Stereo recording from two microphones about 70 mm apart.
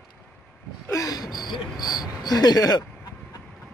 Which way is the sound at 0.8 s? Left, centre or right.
Left.